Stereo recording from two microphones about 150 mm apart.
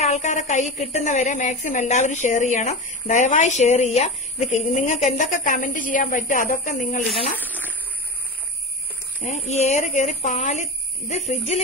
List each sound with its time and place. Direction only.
0.0 s a woman's voice: 50° left (ahead or behind)
7.4 s a sound: 10° left (ahead or behind)
9.2 s a woman's voice: 50° left (ahead or behind)